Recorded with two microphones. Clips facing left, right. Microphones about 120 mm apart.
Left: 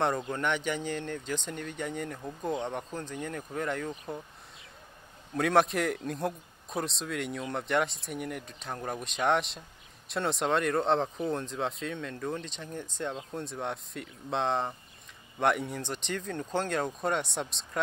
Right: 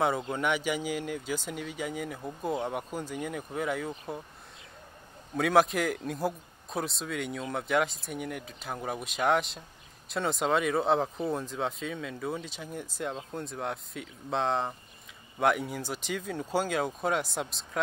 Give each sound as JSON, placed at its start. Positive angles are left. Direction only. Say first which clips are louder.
{"t": 0.3, "sound": "speech", "louder": "right 1 dB", "side_deg": -5}
{"t": 5.3, "sound": "speech", "louder": "right 1 dB", "side_deg": 0}